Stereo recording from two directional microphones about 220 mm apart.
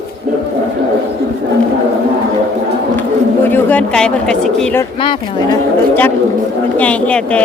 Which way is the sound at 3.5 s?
5° left (ahead or behind).